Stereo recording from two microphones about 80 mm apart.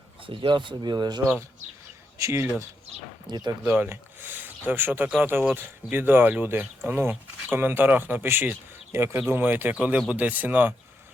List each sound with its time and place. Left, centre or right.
0.3 s speech: right
2.1 s speech: right
3.2 s speech: right
3.7 s speech: right